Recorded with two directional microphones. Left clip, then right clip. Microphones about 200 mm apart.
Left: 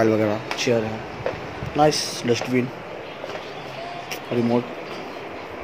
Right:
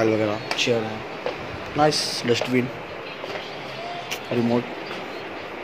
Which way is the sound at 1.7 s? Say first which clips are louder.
Left 1 dB; 15° left (ahead or behind).